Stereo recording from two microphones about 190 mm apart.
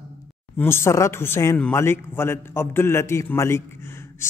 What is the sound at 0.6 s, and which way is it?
Speech, 15° left (ahead or behind).